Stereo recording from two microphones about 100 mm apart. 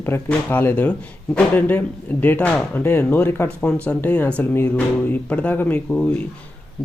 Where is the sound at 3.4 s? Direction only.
10° left (ahead or behind).